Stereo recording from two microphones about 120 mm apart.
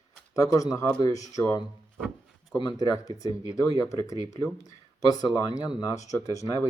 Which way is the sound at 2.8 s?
30° left (ahead or behind).